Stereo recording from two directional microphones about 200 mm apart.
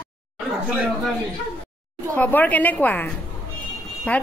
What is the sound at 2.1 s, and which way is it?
Speech, 10° left (ahead or behind).